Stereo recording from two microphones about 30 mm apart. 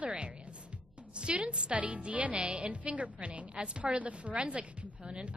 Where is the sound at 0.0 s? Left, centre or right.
Right.